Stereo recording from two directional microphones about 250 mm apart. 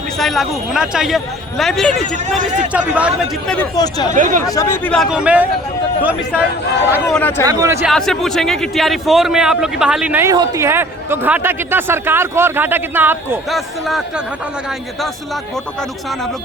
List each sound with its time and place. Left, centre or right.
0.2 s speech: centre
3.8 s speech: centre
4.1 s speech: right
4.4 s a man's voice: centre
7.2 s speech: centre
7.4 s a man's voice: centre
7.9 s a man's voice: centre